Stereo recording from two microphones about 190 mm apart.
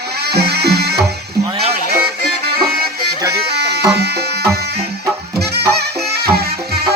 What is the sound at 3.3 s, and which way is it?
Music, 60° right (ahead or behind).